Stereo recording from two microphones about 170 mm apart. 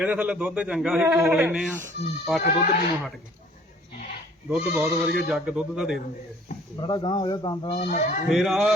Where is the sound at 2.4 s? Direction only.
70° left (ahead or behind).